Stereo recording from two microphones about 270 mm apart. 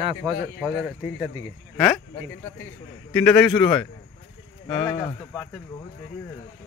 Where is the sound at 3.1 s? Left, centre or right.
Centre.